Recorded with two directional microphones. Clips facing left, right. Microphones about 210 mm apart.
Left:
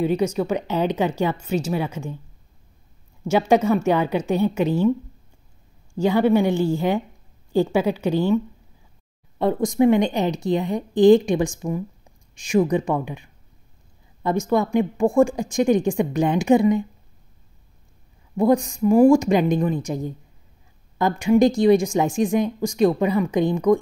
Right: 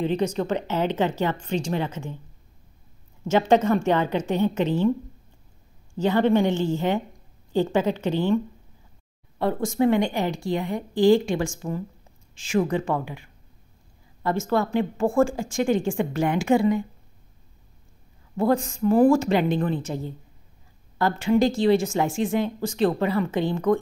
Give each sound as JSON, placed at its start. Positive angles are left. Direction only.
{"t": 0.0, "sound": "speech", "side_deg": 10}
{"t": 3.3, "sound": "speech", "side_deg": 10}
{"t": 5.9, "sound": "speech", "side_deg": 10}
{"t": 9.4, "sound": "a woman's voice", "side_deg": 20}
{"t": 18.3, "sound": "speech", "side_deg": 15}